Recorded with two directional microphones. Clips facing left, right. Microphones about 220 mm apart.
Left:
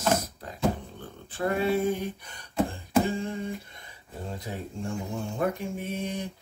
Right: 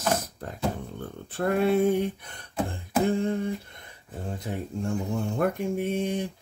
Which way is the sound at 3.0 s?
55° right (ahead or behind).